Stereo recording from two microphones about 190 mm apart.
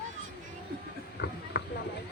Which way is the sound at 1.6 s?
65° left (ahead or behind).